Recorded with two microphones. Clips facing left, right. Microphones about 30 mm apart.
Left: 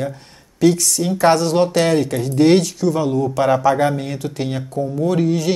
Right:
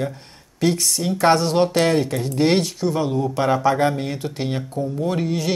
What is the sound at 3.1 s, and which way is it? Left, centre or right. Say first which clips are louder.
Speech: left 3 dB; centre.